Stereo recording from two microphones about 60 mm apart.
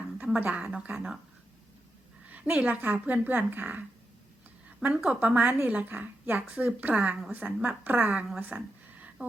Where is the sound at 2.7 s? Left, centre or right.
Right.